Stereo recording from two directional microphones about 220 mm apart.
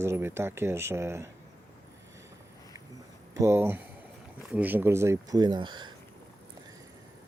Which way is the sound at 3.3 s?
10° right (ahead or behind).